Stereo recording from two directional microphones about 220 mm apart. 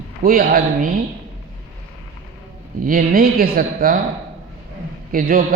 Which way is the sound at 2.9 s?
40° right (ahead or behind).